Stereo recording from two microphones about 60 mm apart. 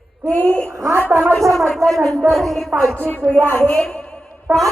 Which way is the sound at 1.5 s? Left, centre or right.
Centre.